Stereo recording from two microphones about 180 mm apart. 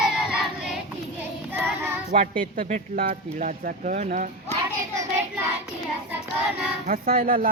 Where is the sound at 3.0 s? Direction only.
55° right (ahead or behind).